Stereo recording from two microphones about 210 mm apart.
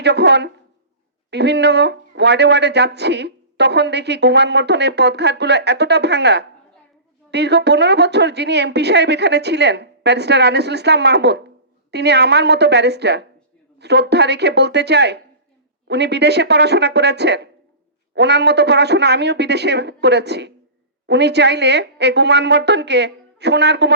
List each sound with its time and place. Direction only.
0.0 s a woman's voice: 55° right (ahead or behind)